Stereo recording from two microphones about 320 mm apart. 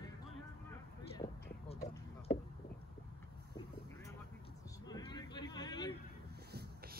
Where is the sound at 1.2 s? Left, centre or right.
Centre.